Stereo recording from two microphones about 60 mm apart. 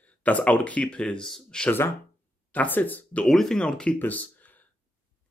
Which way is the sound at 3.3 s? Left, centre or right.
Centre.